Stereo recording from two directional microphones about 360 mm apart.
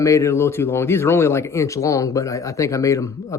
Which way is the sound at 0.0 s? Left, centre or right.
Centre.